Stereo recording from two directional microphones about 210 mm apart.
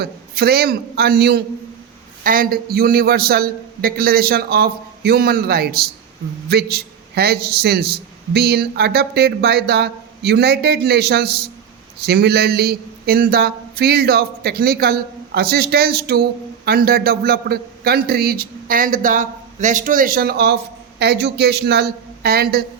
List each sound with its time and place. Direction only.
0.0 s a man's voice: 50° right (ahead or behind)